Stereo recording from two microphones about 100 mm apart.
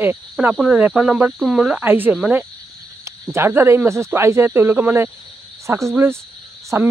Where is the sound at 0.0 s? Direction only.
20° right (ahead or behind).